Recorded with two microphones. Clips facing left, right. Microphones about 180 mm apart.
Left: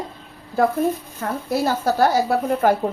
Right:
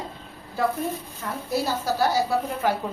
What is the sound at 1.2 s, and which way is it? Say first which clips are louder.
A woman's voice: left 5 dB; 55° left (ahead or behind).